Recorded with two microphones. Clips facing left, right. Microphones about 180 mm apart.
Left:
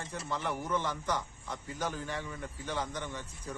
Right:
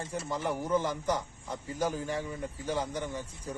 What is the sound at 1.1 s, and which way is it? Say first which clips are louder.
Speech: right 2 dB; 10° right (ahead or behind).